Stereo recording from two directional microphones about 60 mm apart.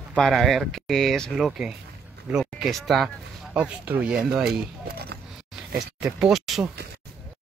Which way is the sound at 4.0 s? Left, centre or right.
Centre.